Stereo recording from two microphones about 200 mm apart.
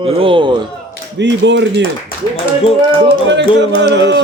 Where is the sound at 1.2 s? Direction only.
60° right (ahead or behind).